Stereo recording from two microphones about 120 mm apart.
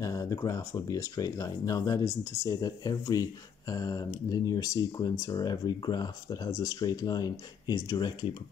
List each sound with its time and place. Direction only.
0.0 s speech: 30° left (ahead or behind)